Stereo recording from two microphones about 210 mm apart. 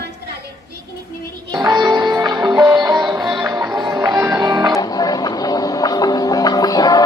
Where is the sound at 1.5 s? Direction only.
20° right (ahead or behind).